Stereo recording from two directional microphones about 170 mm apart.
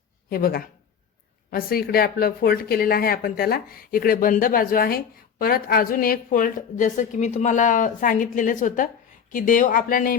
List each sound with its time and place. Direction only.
0.3 s speech: 60° left (ahead or behind)